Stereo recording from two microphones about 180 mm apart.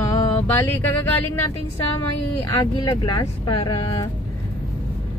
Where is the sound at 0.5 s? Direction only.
10° left (ahead or behind).